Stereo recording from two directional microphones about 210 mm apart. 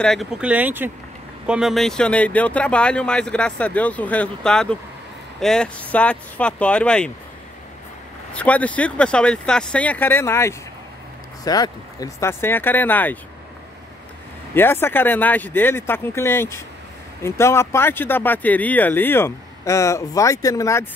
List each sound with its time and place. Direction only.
0.0 s speech: centre (ahead or behind)
8.4 s speech: 5° left (ahead or behind)
14.5 s speech: 10° left (ahead or behind)